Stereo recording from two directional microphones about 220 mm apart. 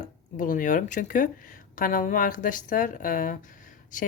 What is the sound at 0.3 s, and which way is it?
Speech, 35° left (ahead or behind).